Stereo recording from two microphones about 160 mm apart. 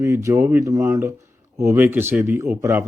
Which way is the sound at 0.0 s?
20° right (ahead or behind).